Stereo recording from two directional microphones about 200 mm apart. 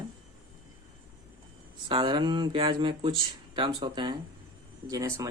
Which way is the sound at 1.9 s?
25° right (ahead or behind).